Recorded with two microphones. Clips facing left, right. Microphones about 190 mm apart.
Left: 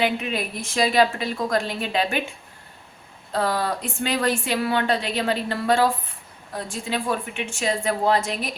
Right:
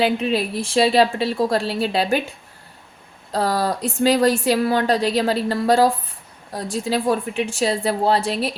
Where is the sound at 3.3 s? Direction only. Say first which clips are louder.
Right 3 dB; 40° right (ahead or behind).